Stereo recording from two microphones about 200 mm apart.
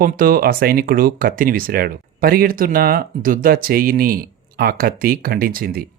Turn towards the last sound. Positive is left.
turn(degrees=-45)  # may be behind; listen again after turning